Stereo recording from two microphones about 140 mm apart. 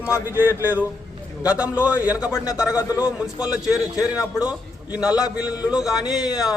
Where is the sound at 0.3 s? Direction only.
15° right (ahead or behind).